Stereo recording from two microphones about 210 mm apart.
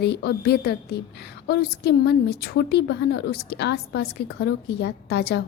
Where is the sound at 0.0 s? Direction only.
50° left (ahead or behind).